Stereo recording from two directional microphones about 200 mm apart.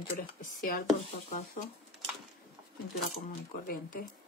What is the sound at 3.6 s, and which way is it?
Speech, 45° left (ahead or behind).